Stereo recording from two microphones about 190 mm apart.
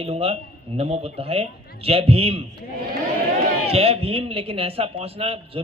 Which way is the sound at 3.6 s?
30° right (ahead or behind).